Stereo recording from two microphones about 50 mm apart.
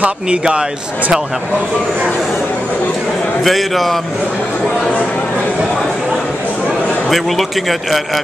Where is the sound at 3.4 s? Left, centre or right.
Centre.